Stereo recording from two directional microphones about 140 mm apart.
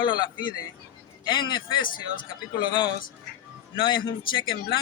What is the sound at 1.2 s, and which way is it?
Speech, 35° left (ahead or behind).